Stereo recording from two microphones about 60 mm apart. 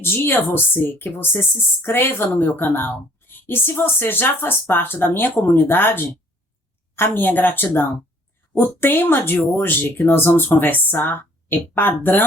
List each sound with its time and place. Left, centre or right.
0.0 s speech: left